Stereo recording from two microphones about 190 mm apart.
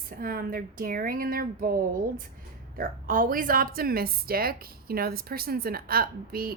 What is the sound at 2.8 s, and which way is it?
A woman's voice, 45° right (ahead or behind).